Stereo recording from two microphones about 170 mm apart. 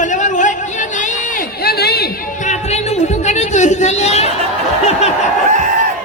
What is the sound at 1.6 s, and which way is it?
Chatter, 70° left (ahead or behind).